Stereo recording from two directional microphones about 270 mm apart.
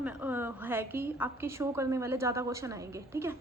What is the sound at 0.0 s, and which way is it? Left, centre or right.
A woman's voice, centre.